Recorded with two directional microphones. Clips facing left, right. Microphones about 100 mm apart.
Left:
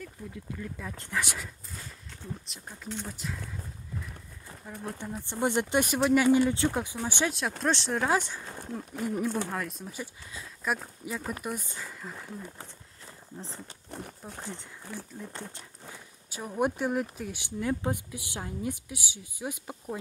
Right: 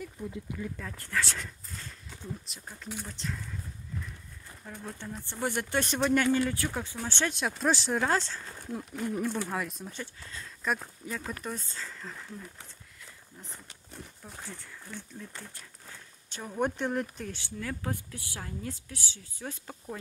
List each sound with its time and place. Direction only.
0.2 s speech: 20° right (ahead or behind)
0.9 s speech: 20° left (ahead or behind)
1.4 s speech: 5° left (ahead or behind)
3.1 s speech: 10° left (ahead or behind)
4.6 s speech: 10° left (ahead or behind)
5.9 s speech: 5° left (ahead or behind)
6.4 s speech: 25° left (ahead or behind); by 8.1 s centre (ahead or behind)
8.1 s speech: 15° left (ahead or behind)
12.5 s a sound: 30° left (ahead or behind)
13.8 s speech: 65° left (ahead or behind)
14.4 s speech: 20° left (ahead or behind)
16.3 s speech: 10° left (ahead or behind)
17.4 s speech: 20° left (ahead or behind)